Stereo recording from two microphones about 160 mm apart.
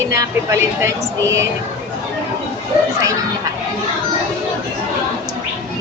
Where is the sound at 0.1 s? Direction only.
20° right (ahead or behind).